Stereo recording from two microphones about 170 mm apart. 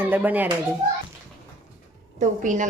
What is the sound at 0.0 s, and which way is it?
Speech, 10° right (ahead or behind).